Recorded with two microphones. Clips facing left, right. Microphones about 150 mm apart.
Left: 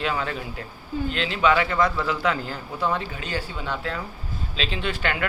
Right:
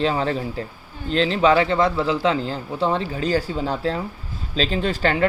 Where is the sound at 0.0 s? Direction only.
30° right (ahead or behind).